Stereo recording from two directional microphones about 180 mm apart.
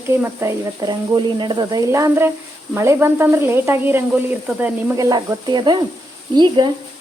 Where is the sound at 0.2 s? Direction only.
15° right (ahead or behind).